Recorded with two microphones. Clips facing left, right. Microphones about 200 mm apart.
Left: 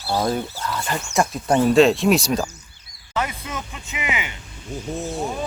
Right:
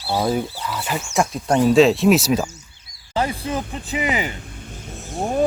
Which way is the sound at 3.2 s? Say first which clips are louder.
Right 5 dB; 30° right (ahead or behind).